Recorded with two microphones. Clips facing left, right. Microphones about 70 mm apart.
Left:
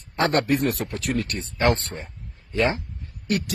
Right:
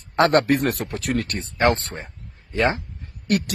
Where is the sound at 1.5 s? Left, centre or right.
Right.